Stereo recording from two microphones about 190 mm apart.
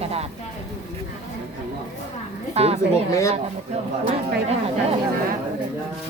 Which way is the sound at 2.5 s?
30° right (ahead or behind).